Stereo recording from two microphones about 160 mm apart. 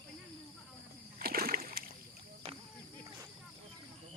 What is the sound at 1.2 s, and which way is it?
Splash, 65° right (ahead or behind).